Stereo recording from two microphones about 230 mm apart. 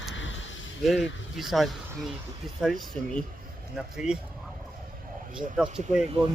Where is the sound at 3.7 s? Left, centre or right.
Centre.